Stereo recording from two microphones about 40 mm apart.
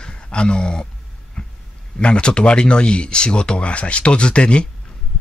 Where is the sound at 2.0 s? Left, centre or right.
Left.